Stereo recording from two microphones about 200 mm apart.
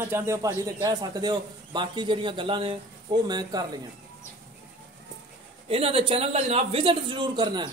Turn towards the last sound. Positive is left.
turn(degrees=-20)  # may be behind; listen again after turning